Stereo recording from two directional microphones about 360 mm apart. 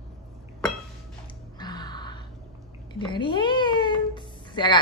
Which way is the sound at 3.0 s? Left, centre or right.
Centre.